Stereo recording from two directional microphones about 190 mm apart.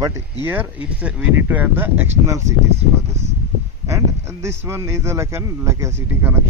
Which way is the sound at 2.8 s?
35° right (ahead or behind).